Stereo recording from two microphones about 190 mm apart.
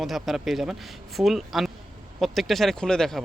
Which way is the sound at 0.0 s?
Centre (ahead or behind).